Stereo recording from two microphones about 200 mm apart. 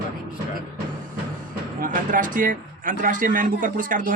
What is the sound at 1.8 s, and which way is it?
Speech, 40° right (ahead or behind).